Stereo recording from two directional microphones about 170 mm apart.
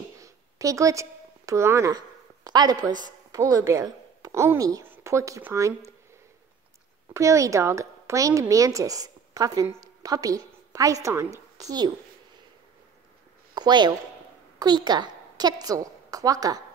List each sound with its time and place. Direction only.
0.2 s a woman's voice: 20° right (ahead or behind)
7.2 s speech: 20° right (ahead or behind)
13.6 s a woman's voice: 25° right (ahead or behind)